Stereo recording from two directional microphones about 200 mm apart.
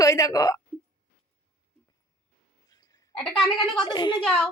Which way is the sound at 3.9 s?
20° left (ahead or behind).